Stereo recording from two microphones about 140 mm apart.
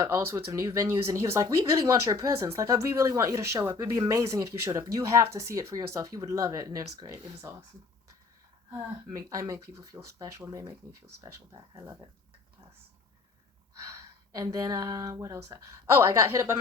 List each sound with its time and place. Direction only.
0.0 s speech: 20° right (ahead or behind)
9.1 s speech: 25° right (ahead or behind)
14.3 s speech: 25° right (ahead or behind)